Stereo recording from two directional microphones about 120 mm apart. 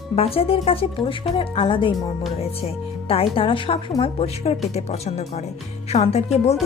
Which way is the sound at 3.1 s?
50° left (ahead or behind).